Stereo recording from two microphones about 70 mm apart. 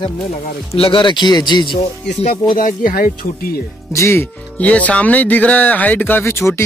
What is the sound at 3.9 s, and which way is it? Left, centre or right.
Speech, left.